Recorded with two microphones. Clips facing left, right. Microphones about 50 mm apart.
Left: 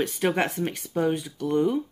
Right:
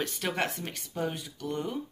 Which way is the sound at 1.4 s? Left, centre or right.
Left.